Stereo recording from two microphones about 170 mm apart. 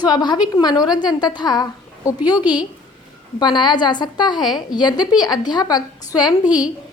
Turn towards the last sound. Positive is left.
turn(degrees=-5)  # may be behind; listen again after turning